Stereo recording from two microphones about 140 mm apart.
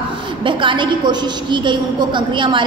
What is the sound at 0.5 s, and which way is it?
A woman's voice, 35° right (ahead or behind).